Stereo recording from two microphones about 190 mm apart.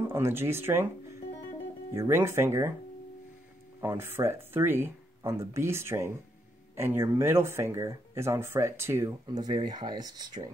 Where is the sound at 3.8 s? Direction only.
10° right (ahead or behind).